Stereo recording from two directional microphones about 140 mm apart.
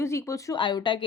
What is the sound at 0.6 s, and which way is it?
Speech, 35° left (ahead or behind).